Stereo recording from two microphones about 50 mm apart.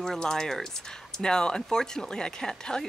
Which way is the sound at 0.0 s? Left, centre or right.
Centre.